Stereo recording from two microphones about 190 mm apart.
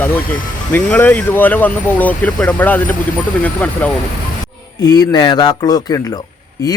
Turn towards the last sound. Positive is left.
turn(degrees=20)  # may be behind; listen again after turning